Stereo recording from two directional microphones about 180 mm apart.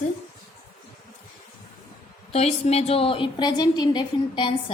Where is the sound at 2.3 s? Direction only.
35° left (ahead or behind).